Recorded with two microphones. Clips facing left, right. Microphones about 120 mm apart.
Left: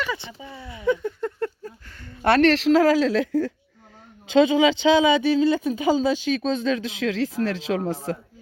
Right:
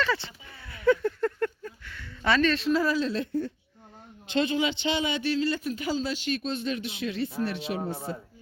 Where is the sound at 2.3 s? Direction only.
70° left (ahead or behind); by 4.0 s 90° left.